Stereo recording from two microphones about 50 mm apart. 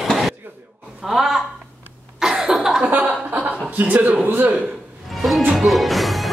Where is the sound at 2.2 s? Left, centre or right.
Centre.